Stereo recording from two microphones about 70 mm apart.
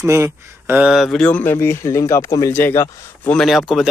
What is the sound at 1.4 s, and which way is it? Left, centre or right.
Speech, left.